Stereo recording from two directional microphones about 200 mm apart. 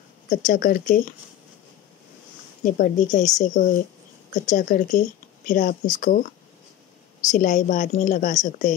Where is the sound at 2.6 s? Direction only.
40° left (ahead or behind).